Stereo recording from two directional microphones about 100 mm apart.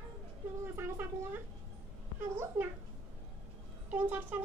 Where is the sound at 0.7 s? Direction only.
25° right (ahead or behind).